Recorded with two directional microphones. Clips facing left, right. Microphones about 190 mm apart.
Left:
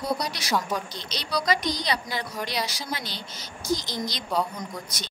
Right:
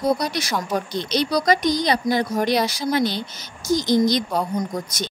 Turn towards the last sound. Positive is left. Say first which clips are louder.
# right 9 dB
turn(degrees=-45)  # may be behind; listen again after turning